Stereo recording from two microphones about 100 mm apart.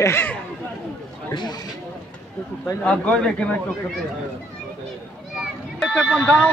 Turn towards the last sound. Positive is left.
turn(degrees=5)  # may be behind; listen again after turning